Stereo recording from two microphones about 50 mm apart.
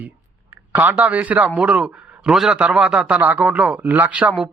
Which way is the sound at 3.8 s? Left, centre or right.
Right.